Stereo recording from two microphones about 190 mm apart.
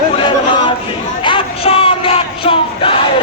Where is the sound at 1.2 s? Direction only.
30° left (ahead or behind).